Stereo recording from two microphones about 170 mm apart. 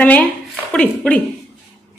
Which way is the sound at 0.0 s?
10° left (ahead or behind).